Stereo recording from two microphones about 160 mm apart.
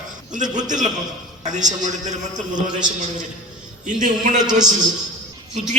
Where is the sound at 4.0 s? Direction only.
50° right (ahead or behind).